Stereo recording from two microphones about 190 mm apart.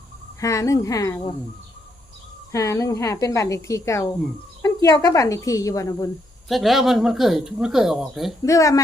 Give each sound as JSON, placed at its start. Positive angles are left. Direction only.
{"t": 0.3, "sound": "a woman's voice", "side_deg": 15}
{"t": 2.5, "sound": "a woman's voice", "side_deg": 15}
{"t": 6.5, "sound": "speech", "side_deg": 0}
{"t": 8.4, "sound": "a woman's voice", "side_deg": 15}